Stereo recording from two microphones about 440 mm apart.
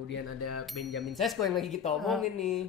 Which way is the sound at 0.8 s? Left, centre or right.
Centre.